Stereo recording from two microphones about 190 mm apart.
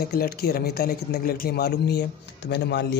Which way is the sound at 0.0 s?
55° left (ahead or behind).